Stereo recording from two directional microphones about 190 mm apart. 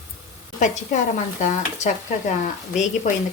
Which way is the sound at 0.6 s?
40° left (ahead or behind).